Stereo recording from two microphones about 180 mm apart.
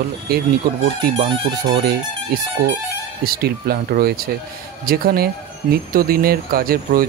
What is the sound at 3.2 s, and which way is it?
Speech, 55° right (ahead or behind).